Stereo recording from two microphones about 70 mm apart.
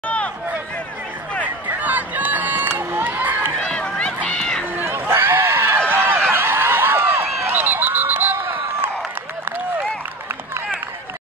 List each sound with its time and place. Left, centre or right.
1.4 s run: right
3.6 s run: centre
4.7 s run: right
5.9 s a sound: right